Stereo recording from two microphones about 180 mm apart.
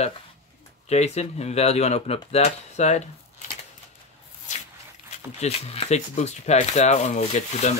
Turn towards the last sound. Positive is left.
turn(degrees=40)  # may be behind; listen again after turning